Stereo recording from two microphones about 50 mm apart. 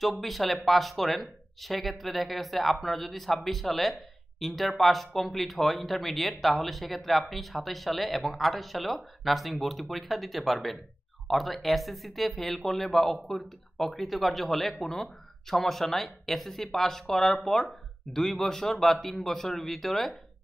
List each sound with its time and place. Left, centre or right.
0.0 s speech: centre